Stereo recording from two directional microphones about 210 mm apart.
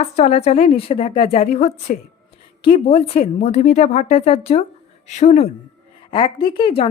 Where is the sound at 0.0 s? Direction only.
30° left (ahead or behind).